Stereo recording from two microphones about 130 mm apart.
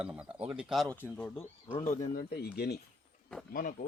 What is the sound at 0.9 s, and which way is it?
Speech, 15° left (ahead or behind).